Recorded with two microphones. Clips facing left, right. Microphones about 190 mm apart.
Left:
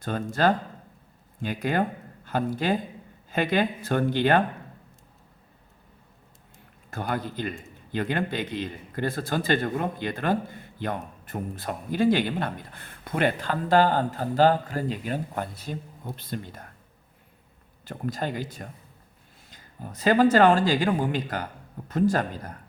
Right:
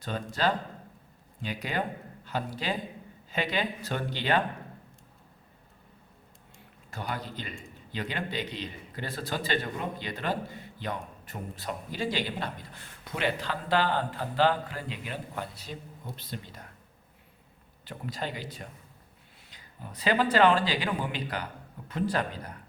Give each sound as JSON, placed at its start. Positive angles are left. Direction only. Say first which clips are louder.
{"t": 0.0, "sound": "speech", "louder": "left 5 dB", "side_deg": 50}
{"t": 6.9, "sound": "speech", "louder": "left 6 dB", "side_deg": 50}
{"t": 17.8, "sound": "speech", "louder": "left 6 dB", "side_deg": 45}